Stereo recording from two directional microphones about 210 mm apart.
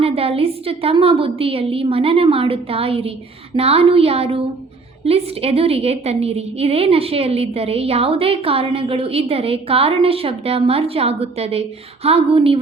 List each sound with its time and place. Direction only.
0.0 s a woman's voice: 25° right (ahead or behind)